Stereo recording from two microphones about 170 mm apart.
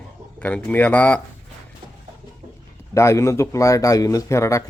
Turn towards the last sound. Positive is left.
turn(degrees=15)  # may be behind; listen again after turning